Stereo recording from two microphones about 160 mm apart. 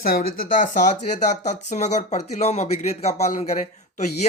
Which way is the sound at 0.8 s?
45° left (ahead or behind).